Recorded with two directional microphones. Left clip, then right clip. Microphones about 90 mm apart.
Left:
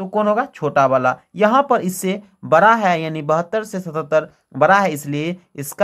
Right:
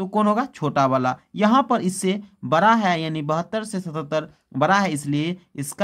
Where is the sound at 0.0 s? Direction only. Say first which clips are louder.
Left 4 dB; 40° right (ahead or behind).